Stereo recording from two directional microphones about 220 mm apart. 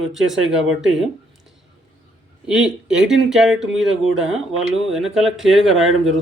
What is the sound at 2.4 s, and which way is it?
Speech, 5° right (ahead or behind).